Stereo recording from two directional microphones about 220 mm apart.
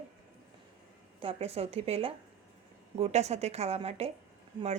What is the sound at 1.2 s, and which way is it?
Speech, 25° right (ahead or behind).